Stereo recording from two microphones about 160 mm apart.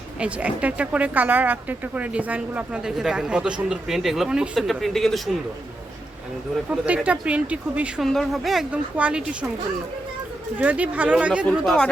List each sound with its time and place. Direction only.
0.2 s speech: 10° right (ahead or behind)
6.7 s speech: 10° right (ahead or behind)
10.6 s speech: 10° right (ahead or behind)
11.4 s speech: 5° left (ahead or behind)